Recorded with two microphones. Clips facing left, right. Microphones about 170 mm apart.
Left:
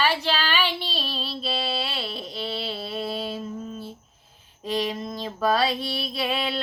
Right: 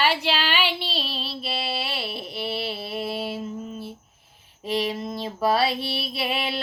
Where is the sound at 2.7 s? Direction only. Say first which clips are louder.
Even; 5° right (ahead or behind).